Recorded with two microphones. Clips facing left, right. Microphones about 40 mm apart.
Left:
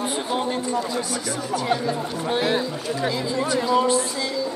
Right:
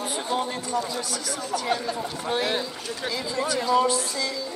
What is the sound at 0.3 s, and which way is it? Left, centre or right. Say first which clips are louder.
Speech: left 1 dB; left.